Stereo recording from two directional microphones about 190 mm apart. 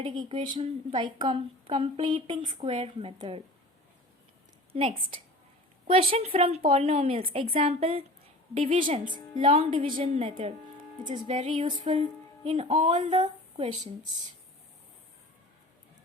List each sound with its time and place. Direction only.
0.0 s a woman's voice: 25° right (ahead or behind)
4.7 s a woman's voice: 30° right (ahead or behind)